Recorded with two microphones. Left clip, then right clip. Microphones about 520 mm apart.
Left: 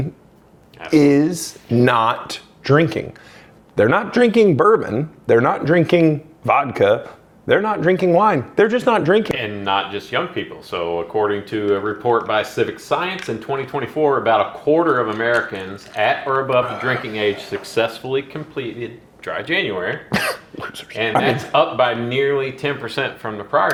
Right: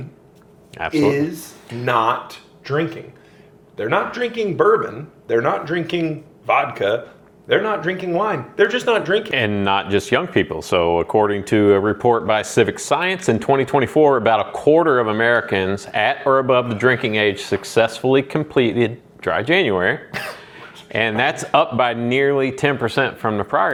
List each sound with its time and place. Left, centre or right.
0.9 s speech: left
3.8 s speech: left
9.4 s speech: right
19.2 s speech: right
20.1 s speech: left
20.9 s speech: right
23.5 s speech: right